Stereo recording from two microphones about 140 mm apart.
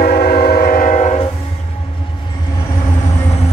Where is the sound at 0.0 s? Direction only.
90° left; by 1.1 s 65° left (ahead or behind).